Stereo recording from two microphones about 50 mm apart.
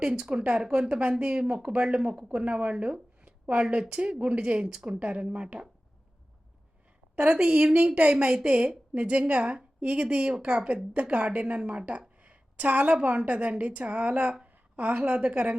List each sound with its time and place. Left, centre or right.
0.0 s speech: centre
7.2 s a woman's voice: right
14.4 s a sound: right
15.2 s speech: right